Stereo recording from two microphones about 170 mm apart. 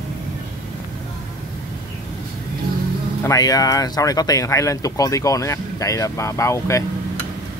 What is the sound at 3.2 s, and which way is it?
Speech, 20° left (ahead or behind).